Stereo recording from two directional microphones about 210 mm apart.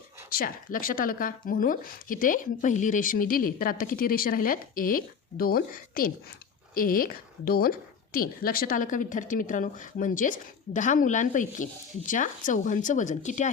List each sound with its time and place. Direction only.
0.3 s a woman's voice: 45° left (ahead or behind)